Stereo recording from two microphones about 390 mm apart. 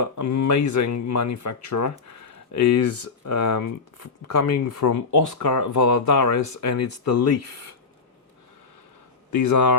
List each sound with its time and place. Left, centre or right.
0.0 s speech: left
9.3 s speech: left